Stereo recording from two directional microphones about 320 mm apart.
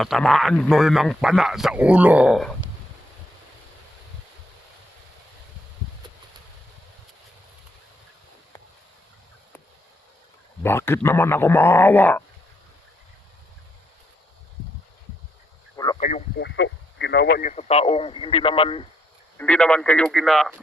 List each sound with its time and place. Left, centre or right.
0.0 s speech: centre
10.6 s speech: centre
15.7 s a sound: centre
16.0 s speech: left
16.6 s speech: left; by 18.9 s centre
19.4 s speech: centre